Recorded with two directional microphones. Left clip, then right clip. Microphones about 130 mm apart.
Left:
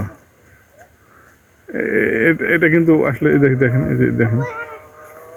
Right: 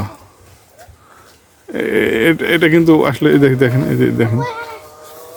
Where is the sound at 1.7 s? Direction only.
40° right (ahead or behind).